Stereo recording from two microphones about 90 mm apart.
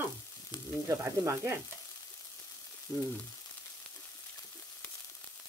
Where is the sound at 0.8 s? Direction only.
35° right (ahead or behind).